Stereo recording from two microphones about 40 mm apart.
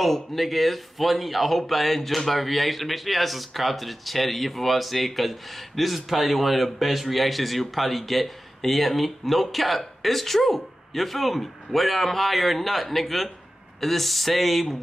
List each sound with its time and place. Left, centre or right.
0.0 s speech: centre